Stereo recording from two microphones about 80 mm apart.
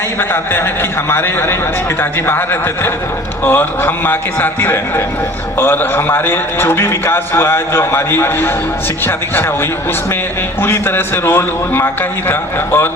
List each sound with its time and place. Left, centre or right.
1.1 s a man's voice: left
10.6 s a man's voice: left